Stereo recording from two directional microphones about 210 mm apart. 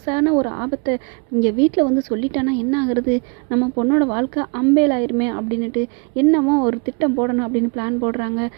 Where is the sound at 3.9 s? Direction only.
15° right (ahead or behind).